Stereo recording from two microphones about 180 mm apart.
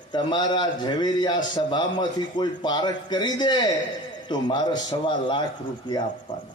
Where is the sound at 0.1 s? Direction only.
25° left (ahead or behind).